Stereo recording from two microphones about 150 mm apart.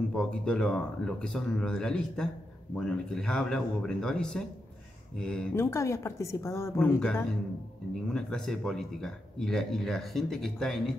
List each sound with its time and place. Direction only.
0.1 s speech: 5° left (ahead or behind)
5.6 s a woman's voice: 20° left (ahead or behind)
6.8 s speech: 10° left (ahead or behind)